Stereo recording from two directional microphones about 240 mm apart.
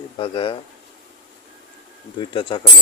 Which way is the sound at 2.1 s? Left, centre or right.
Centre.